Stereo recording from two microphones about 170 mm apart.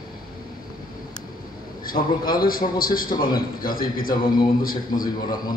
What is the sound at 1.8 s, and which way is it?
A man's voice, 55° left (ahead or behind).